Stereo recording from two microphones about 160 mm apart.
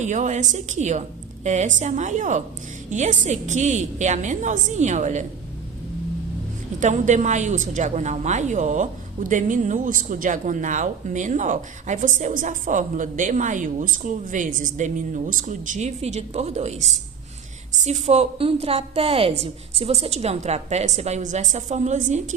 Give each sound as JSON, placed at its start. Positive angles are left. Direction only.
{"t": 0.0, "sound": "a woman's voice", "side_deg": -50}
{"t": 6.7, "sound": "a woman's voice", "side_deg": -50}